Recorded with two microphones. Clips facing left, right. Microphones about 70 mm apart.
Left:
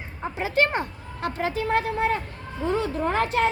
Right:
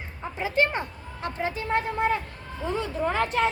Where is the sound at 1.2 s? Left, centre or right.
Left.